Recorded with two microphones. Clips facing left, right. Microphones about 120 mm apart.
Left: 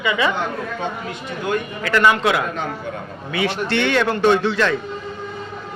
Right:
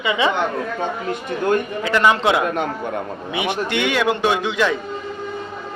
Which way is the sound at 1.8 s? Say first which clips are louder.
Left 2 dB; 20° right (ahead or behind).